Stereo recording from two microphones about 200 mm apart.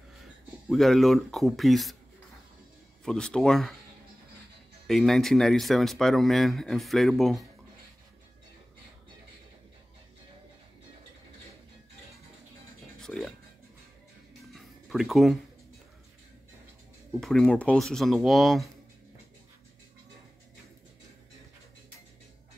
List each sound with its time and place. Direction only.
0.7 s speech: centre (ahead or behind)
3.1 s speech: 5° left (ahead or behind)
4.8 s speech: centre (ahead or behind)
13.0 s a sound: 5° left (ahead or behind)
14.5 s a sound: centre (ahead or behind)
17.2 s speech: 5° left (ahead or behind)